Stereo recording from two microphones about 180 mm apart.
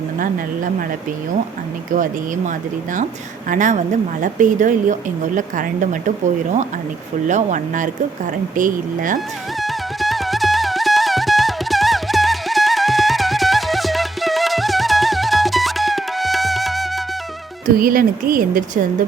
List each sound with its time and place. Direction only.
0.2 s a woman's voice: 50° right (ahead or behind)
1.9 s a woman's voice: 45° right (ahead or behind)
3.5 s a woman's voice: 45° right (ahead or behind)
9.6 s music: centre (ahead or behind)
17.7 s a woman's voice: 50° right (ahead or behind)